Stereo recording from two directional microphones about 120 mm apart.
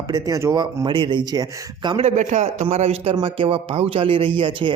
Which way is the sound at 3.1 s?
45° right (ahead or behind).